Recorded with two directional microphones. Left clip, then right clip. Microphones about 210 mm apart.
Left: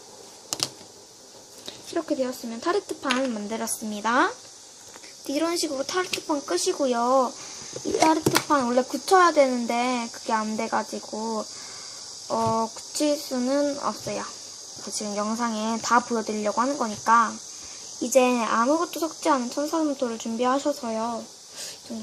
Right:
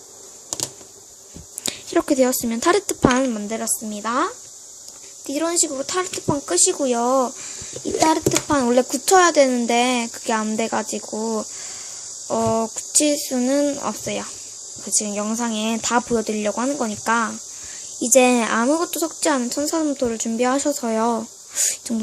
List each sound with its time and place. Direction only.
1.6 s speech: 45° right (ahead or behind)
3.3 s speech: 15° right (ahead or behind)
5.3 s speech: 15° right (ahead or behind); by 21.2 s 30° right (ahead or behind)